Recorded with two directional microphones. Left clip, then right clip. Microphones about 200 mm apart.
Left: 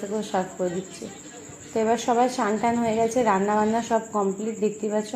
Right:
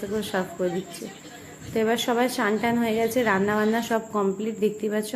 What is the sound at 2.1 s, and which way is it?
A woman's voice, 10° right (ahead or behind).